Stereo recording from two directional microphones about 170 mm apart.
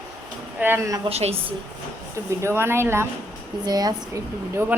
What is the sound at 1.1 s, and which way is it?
Speech, 35° right (ahead or behind).